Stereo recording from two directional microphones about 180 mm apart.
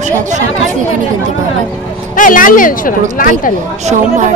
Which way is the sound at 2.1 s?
50° left (ahead or behind).